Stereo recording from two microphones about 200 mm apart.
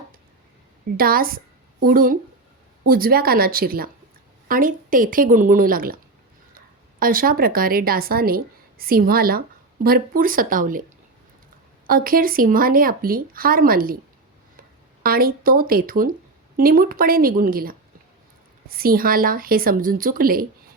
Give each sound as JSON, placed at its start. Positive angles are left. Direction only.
{"t": 0.9, "sound": "speech", "side_deg": -45}
{"t": 7.0, "sound": "speech", "side_deg": -45}
{"t": 15.0, "sound": "speech", "side_deg": -50}